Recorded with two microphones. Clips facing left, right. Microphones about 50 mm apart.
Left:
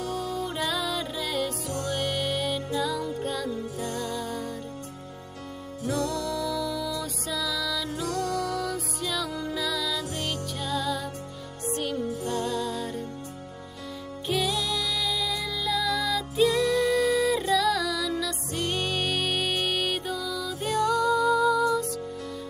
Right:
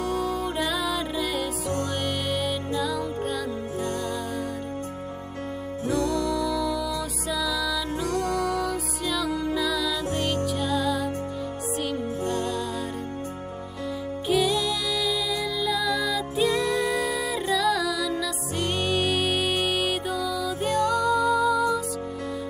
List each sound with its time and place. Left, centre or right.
0.2 s music: centre
0.7 s music: centre
1.9 s music: centre
3.4 s music: right
5.9 s music: right
6.6 s music: centre
7.9 s music: right
8.5 s music: centre
12.0 s music: right
12.4 s music: centre
14.2 s music: centre
18.6 s music: centre